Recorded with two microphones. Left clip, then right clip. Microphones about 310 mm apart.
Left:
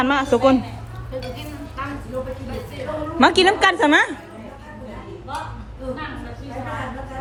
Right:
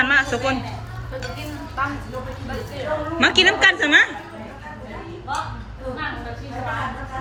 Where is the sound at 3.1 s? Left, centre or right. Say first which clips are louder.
Left 1 dB; left.